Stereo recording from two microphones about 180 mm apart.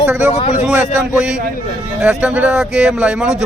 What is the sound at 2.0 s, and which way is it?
Speech, 5° right (ahead or behind).